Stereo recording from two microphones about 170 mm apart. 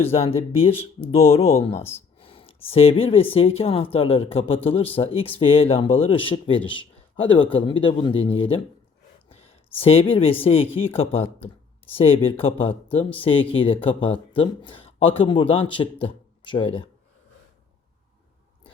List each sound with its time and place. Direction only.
0.1 s speech: 35° left (ahead or behind)
1.8 s speech: 15° left (ahead or behind)
2.1 s a sound: 35° left (ahead or behind)
2.7 s speech: 35° left (ahead or behind)
9.8 s speech: 35° left (ahead or behind)